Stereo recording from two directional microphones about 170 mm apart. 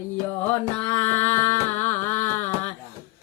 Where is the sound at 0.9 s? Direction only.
10° left (ahead or behind).